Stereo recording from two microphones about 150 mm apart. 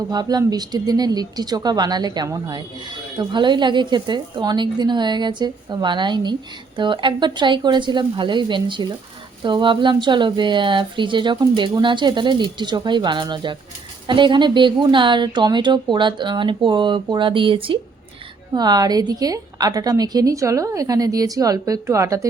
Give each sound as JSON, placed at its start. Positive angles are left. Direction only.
{"t": 0.1, "sound": "speech", "side_deg": -25}